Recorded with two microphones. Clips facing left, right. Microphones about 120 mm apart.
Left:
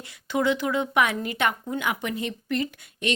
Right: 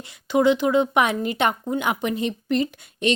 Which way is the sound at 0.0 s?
20° right (ahead or behind).